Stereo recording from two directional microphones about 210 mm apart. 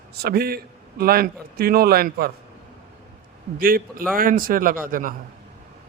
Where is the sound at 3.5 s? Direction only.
45° right (ahead or behind).